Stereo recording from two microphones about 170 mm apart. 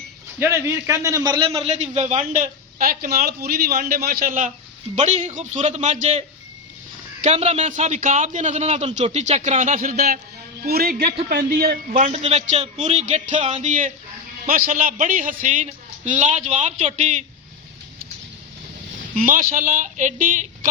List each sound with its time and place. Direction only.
0.3 s a man's voice: 15° right (ahead or behind)
1.6 s a man's voice: 40° right (ahead or behind); by 12.0 s 60° right (ahead or behind)
12.0 s a man's voice: 40° right (ahead or behind)
19.1 s a man's voice: 50° right (ahead or behind)